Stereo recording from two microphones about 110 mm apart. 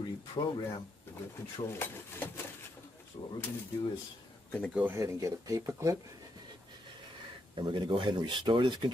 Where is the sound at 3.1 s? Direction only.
45° left (ahead or behind).